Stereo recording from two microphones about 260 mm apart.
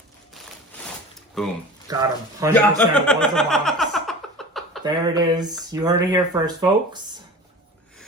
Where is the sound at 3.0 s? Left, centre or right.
Centre.